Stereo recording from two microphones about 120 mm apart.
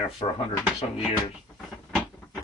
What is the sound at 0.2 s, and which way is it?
Speech, 45° left (ahead or behind).